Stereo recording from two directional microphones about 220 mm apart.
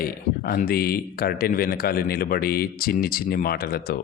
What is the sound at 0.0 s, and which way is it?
Speech, 40° left (ahead or behind).